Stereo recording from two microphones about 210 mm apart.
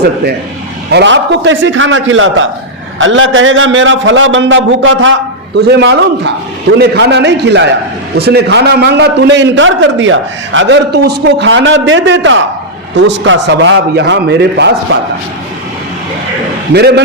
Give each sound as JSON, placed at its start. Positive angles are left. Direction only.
{"t": 0.9, "sound": "a man's voice", "side_deg": -55}
{"t": 5.5, "sound": "a man's voice", "side_deg": -55}
{"t": 16.7, "sound": "a man's voice", "side_deg": -50}